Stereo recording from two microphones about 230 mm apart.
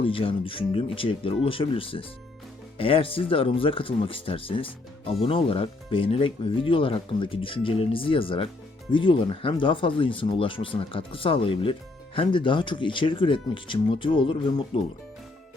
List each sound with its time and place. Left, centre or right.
0.0 s speech: left